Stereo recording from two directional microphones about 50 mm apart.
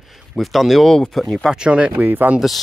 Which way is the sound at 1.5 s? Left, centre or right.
Centre.